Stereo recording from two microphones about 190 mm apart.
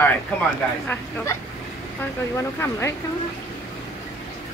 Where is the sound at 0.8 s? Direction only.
15° left (ahead or behind).